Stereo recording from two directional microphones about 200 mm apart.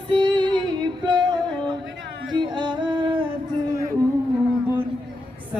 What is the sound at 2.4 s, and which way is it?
Singing, 25° right (ahead or behind).